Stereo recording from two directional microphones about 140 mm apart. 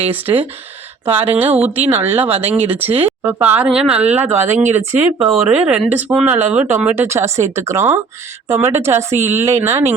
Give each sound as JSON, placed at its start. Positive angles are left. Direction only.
{"t": 0.1, "sound": "speech", "side_deg": -15}
{"t": 5.2, "sound": "a woman's voice", "side_deg": -5}